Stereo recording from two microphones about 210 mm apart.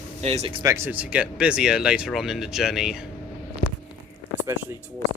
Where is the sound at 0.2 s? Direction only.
30° right (ahead or behind).